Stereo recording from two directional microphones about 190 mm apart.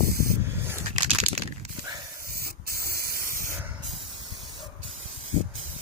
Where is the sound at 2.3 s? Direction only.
55° right (ahead or behind).